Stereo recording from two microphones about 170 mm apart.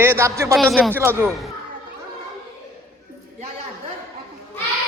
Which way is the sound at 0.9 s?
15° right (ahead or behind).